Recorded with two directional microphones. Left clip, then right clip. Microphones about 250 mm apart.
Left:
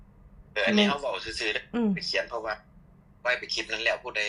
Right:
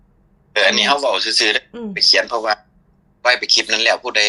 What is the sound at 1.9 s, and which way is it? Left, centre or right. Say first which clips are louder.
A man's voice: right 15 dB; right.